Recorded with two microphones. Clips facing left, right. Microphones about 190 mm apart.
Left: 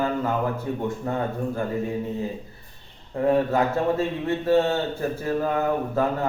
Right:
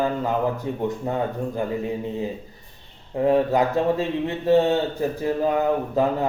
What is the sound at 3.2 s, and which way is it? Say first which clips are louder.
Speech: right 2 dB; 15° right (ahead or behind).